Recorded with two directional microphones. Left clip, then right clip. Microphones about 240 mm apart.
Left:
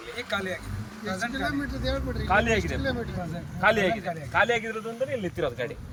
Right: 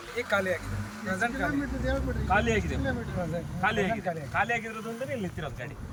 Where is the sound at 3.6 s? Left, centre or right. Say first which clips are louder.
Left 5 dB; left.